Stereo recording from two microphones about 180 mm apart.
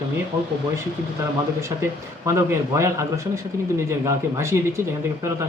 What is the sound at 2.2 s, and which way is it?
Speech, 15° right (ahead or behind).